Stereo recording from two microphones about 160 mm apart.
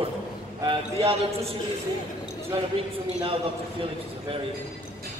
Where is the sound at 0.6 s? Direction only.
35° right (ahead or behind).